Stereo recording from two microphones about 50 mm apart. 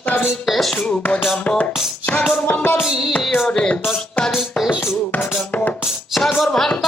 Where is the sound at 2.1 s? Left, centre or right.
Left.